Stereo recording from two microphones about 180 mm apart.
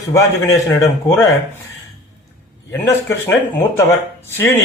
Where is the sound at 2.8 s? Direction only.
15° left (ahead or behind).